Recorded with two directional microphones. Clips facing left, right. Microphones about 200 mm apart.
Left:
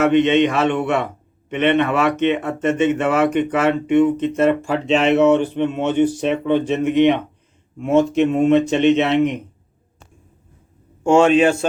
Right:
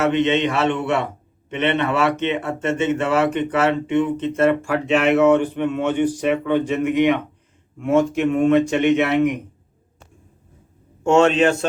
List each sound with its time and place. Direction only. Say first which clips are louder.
0.2 s speech: left 3 dB; 15° left (ahead or behind)
11.0 s speech: left 2 dB; 5° left (ahead or behind)